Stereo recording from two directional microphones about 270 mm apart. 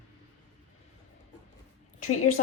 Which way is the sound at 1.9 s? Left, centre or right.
Left.